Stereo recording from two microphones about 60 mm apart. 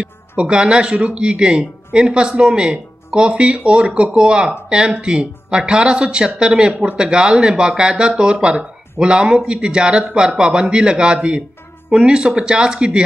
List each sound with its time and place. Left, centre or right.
0.0 s speech: centre